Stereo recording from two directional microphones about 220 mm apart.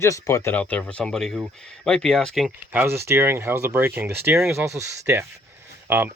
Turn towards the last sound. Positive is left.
turn(degrees=-10)  # may be behind; listen again after turning